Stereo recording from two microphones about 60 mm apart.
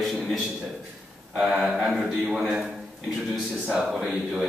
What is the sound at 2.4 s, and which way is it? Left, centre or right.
A man's voice, centre.